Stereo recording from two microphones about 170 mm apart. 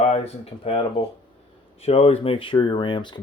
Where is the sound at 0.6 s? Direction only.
35° left (ahead or behind).